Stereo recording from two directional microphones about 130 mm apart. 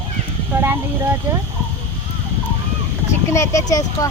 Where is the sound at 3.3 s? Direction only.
25° left (ahead or behind).